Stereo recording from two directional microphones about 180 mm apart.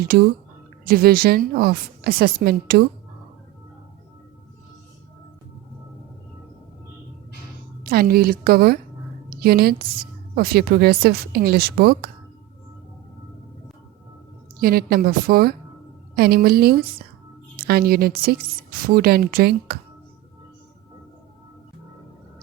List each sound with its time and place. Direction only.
0.0 s a woman's voice: 60° right (ahead or behind)
7.9 s a woman's voice: 55° right (ahead or behind)
14.6 s a woman's voice: 55° right (ahead or behind)